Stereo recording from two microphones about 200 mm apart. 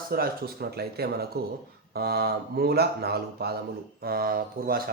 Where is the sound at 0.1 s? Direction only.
50° right (ahead or behind).